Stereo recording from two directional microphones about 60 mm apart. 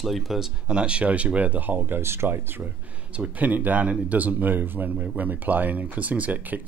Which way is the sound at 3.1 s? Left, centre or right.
Right.